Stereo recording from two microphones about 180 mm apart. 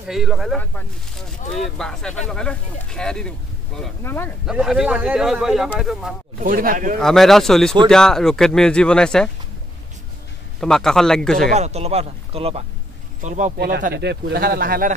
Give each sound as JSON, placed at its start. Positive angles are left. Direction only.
{"t": 0.1, "sound": "speech", "side_deg": 0}
{"t": 4.5, "sound": "speech", "side_deg": -5}
{"t": 6.4, "sound": "speech", "side_deg": -50}
{"t": 7.0, "sound": "speech", "side_deg": 0}
{"t": 10.6, "sound": "speech", "side_deg": 5}
{"t": 11.5, "sound": "speech", "side_deg": -35}
{"t": 13.6, "sound": "speech", "side_deg": -65}